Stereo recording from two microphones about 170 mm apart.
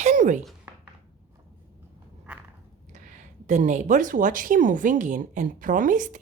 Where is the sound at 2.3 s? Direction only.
5° right (ahead or behind).